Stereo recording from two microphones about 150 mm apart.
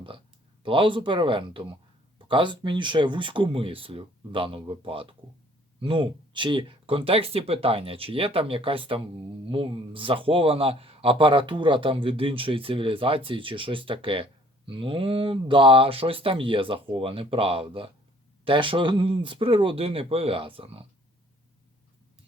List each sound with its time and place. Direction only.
0.6 s a man's voice: 35° right (ahead or behind)